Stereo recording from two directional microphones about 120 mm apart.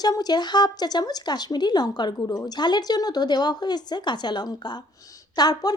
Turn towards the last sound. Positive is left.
turn(degrees=35)  # may be behind; listen again after turning